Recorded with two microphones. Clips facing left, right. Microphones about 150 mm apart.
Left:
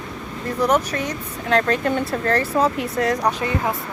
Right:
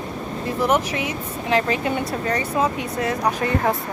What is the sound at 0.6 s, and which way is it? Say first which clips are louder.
Speech: left 1 dB; 5° right (ahead or behind).